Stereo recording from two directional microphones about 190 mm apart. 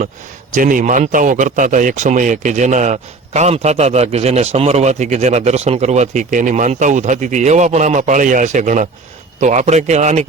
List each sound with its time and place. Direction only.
0.5 s a man's voice: 45° right (ahead or behind)